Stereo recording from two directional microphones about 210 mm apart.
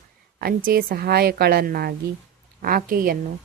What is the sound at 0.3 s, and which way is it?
A woman's voice, 45° right (ahead or behind).